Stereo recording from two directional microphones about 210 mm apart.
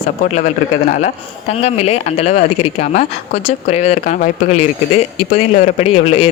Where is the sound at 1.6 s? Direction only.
30° left (ahead or behind).